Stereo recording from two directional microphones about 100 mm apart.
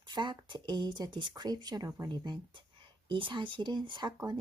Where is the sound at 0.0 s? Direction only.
50° right (ahead or behind).